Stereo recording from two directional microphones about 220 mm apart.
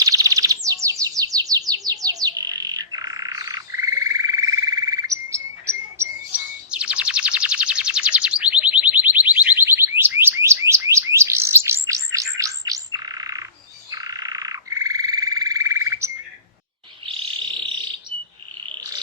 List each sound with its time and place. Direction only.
0.0 s bird: 15° right (ahead or behind)
13.9 s frog: 15° right (ahead or behind)